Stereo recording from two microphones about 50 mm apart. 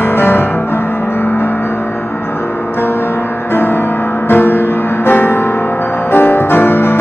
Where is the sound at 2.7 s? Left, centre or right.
Left.